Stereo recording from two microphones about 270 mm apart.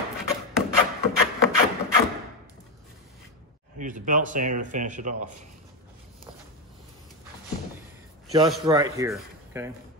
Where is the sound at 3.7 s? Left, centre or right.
Right.